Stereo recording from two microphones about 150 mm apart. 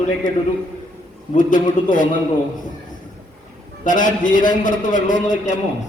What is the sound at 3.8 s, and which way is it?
A man's voice, 60° left (ahead or behind).